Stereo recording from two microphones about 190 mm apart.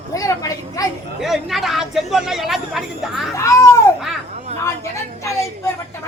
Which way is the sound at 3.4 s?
15° left (ahead or behind).